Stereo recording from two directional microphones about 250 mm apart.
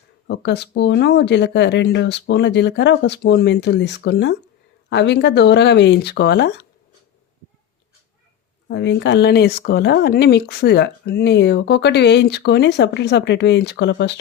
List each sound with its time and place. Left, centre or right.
0.3 s speech: left
8.6 s speech: left